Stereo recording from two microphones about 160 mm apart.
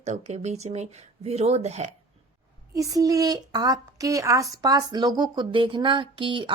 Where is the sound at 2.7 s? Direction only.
20° right (ahead or behind).